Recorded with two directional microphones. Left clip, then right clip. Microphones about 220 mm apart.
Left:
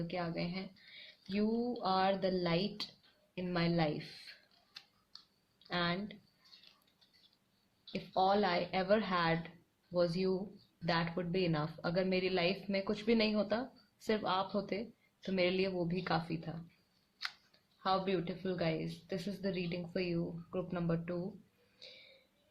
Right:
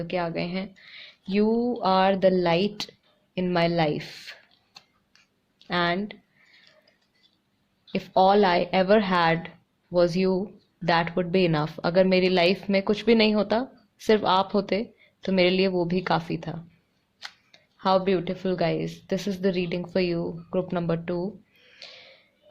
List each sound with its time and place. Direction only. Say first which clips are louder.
0.0 s a woman's voice: right 12 dB; 45° right (ahead or behind)
5.6 s speech: right 12 dB; 40° right (ahead or behind)
7.9 s a woman's voice: right 13 dB; 40° right (ahead or behind)
17.8 s a woman's voice: right 12 dB; 40° right (ahead or behind)